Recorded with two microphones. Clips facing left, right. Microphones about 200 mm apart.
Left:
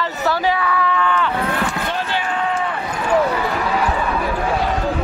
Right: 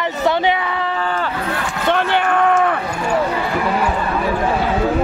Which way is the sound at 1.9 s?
60° right (ahead or behind).